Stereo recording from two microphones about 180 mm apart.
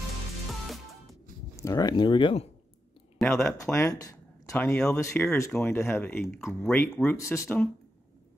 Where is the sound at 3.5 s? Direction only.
15° left (ahead or behind).